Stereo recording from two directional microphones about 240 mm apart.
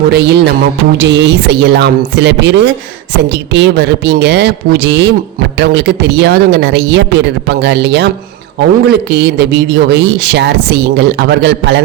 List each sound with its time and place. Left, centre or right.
0.1 s a man's voice: right